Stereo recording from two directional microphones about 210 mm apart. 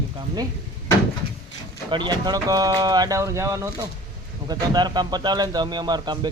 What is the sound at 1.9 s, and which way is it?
Speech, 20° right (ahead or behind).